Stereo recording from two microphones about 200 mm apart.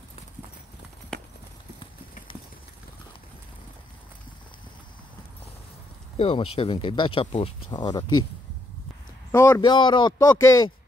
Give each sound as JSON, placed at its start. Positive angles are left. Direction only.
{"t": 6.1, "sound": "speech", "side_deg": 30}
{"t": 9.3, "sound": "a man's voice", "side_deg": 15}